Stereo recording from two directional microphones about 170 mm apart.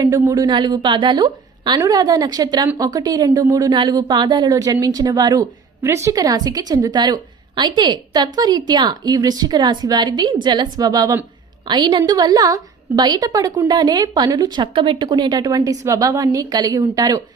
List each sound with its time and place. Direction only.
0.0 s a woman's voice: 20° right (ahead or behind)